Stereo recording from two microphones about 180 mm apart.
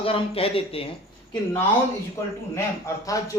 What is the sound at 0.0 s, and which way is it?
Speech, 30° left (ahead or behind).